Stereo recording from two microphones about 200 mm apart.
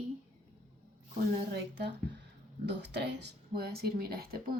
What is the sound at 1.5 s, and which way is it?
Speech, 55° right (ahead or behind).